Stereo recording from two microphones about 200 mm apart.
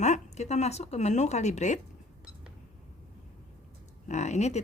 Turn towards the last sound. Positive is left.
turn(degrees=35)  # may be behind; listen again after turning